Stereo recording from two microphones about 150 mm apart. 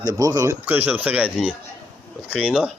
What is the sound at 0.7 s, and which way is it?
Speech, 10° right (ahead or behind).